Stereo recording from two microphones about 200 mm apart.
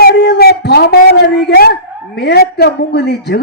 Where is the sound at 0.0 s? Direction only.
55° left (ahead or behind).